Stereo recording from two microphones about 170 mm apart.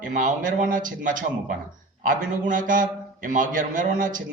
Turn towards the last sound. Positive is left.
turn(degrees=-50)  # may be behind; listen again after turning